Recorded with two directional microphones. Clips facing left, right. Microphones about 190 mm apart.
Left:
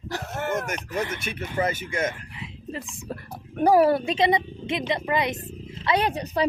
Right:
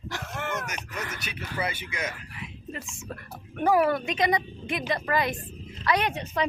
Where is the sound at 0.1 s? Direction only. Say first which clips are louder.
Left 5 dB; 40° left (ahead or behind).